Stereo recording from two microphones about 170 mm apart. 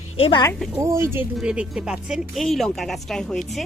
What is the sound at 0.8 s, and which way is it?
Speech, 15° right (ahead or behind).